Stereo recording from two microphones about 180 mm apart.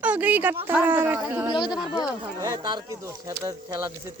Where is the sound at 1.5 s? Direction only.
25° left (ahead or behind).